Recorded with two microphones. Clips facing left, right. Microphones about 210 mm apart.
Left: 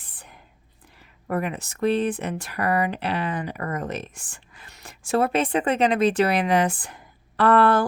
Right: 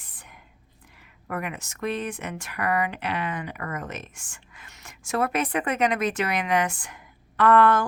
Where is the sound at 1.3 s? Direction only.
35° left (ahead or behind).